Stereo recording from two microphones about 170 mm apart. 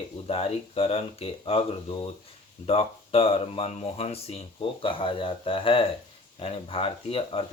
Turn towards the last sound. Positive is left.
turn(degrees=35)  # may be behind; listen again after turning